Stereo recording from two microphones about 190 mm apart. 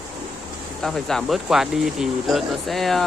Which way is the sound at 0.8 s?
Centre (ahead or behind).